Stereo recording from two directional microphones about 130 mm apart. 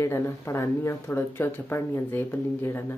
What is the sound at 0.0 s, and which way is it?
Speech, 20° left (ahead or behind).